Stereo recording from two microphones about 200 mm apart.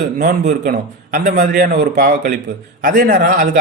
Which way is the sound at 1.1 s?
40° right (ahead or behind).